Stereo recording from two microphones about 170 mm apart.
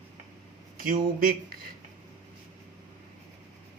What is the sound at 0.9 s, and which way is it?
Speech, 55° right (ahead or behind).